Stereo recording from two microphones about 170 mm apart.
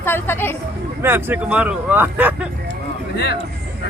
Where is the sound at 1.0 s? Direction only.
10° right (ahead or behind).